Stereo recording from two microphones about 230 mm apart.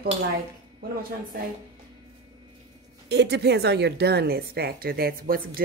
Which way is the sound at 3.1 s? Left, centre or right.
Right.